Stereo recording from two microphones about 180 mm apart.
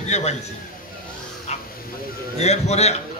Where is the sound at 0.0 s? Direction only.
40° left (ahead or behind).